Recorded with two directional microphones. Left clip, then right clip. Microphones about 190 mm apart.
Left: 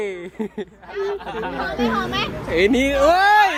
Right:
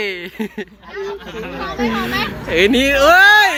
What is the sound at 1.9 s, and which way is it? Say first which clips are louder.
Speech: right 2 dB; 50° left (ahead or behind).